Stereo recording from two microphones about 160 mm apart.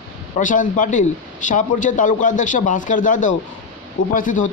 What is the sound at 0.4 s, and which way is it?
A man's voice, 55° left (ahead or behind).